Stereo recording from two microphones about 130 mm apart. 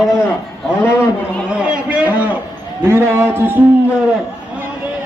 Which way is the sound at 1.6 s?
10° right (ahead or behind).